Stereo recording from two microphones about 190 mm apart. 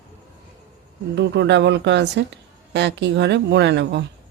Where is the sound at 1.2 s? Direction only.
65° right (ahead or behind).